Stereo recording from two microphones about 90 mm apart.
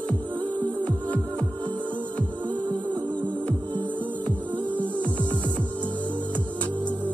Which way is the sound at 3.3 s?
10° left (ahead or behind).